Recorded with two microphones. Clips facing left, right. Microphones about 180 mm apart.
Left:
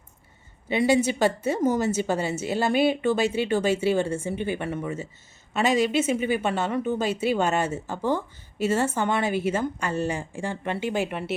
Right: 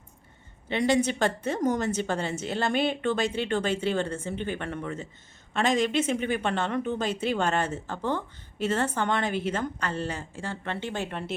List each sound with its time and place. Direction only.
0.7 s speech: 5° left (ahead or behind)